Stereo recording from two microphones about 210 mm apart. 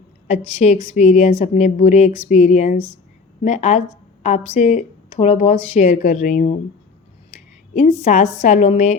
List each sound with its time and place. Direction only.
0.3 s speech: 30° left (ahead or behind)
7.3 s a sound: 40° left (ahead or behind)
8.0 s speech: 35° left (ahead or behind)